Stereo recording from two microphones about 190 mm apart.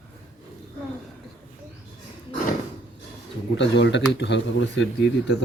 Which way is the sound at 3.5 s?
65° left (ahead or behind).